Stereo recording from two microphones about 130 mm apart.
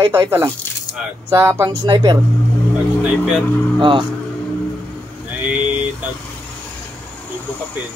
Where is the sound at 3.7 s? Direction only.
40° right (ahead or behind).